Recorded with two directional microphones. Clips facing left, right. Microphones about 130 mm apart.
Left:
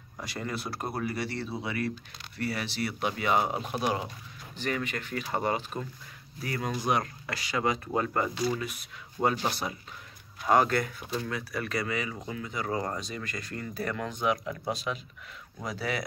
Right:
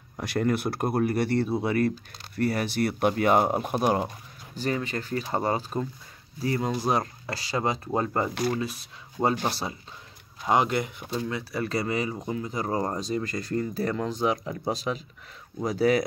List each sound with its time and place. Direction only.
0.2 s speech: 60° right (ahead or behind)
4.6 s speech: 30° right (ahead or behind)
10.4 s speech: 15° right (ahead or behind); by 16.0 s 40° right (ahead or behind)